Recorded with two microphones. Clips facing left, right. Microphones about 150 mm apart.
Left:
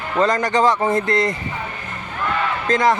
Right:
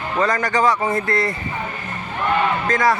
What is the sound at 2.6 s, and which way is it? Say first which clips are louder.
Speech: left 5 dB; 20° left (ahead or behind).